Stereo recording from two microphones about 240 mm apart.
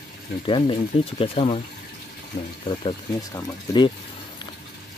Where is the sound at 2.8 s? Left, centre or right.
Centre.